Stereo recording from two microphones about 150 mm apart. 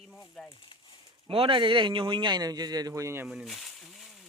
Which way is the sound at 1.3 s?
35° right (ahead or behind).